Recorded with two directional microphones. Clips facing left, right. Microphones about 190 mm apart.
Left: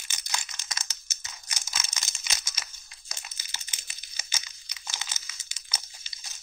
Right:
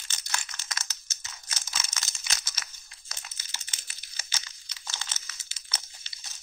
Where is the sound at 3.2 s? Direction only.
10° left (ahead or behind).